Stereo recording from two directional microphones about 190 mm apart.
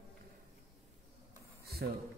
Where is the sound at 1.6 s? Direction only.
55° right (ahead or behind).